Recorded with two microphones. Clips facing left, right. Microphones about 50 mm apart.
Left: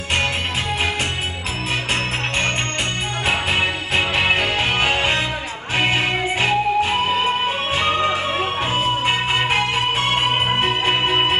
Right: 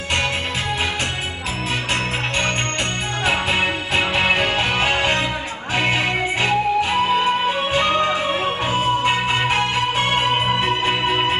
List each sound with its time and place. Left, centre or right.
3.3 s music: left